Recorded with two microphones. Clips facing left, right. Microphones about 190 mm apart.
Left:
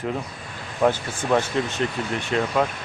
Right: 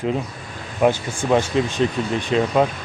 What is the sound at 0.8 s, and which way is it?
A man's voice, 10° right (ahead or behind).